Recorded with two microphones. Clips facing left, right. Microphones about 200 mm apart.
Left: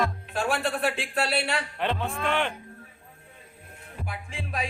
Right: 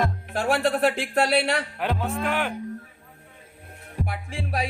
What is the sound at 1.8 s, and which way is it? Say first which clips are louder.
Speech: even; 5° right (ahead or behind).